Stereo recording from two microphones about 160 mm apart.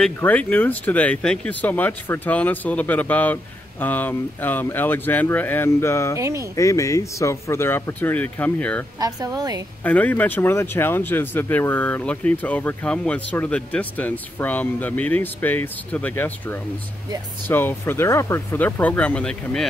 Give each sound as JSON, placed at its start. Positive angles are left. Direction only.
{"t": 0.0, "sound": "speech", "side_deg": 10}
{"t": 6.1, "sound": "a woman's voice", "side_deg": -20}
{"t": 6.5, "sound": "speech", "side_deg": 20}
{"t": 9.0, "sound": "a woman's voice", "side_deg": -25}
{"t": 9.8, "sound": "speech", "side_deg": 10}